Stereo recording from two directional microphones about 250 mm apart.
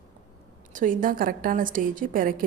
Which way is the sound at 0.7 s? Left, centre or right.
Right.